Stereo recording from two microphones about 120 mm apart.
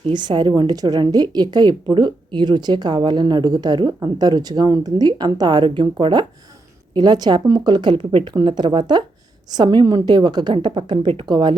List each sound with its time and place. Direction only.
0.1 s a woman's voice: 40° right (ahead or behind)